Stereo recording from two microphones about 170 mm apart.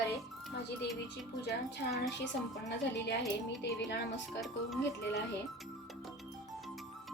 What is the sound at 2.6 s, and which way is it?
Speech, 90° left.